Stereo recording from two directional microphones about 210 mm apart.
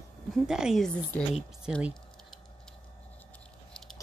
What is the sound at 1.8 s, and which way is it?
Typing, 5° right (ahead or behind).